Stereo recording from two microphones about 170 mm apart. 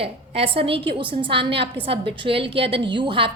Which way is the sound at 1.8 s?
30° right (ahead or behind).